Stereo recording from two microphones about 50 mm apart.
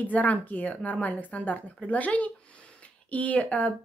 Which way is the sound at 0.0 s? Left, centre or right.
Left.